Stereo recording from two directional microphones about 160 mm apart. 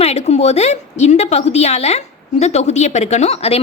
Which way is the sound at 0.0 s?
40° left (ahead or behind).